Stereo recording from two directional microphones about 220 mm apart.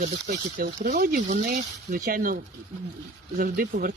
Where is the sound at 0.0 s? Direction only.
40° right (ahead or behind).